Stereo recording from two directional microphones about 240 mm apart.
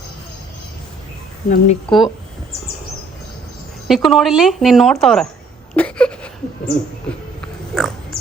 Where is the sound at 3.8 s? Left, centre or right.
Centre.